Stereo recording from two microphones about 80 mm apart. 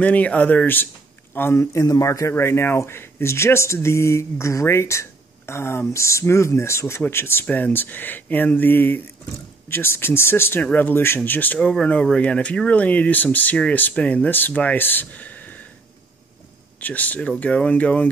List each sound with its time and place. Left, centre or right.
0.0 s a man's voice: centre
16.8 s speech: left